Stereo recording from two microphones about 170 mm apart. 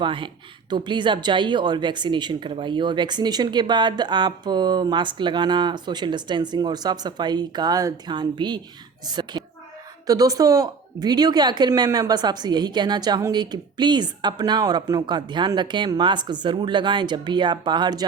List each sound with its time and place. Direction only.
0.0 s a woman's voice: 30° right (ahead or behind)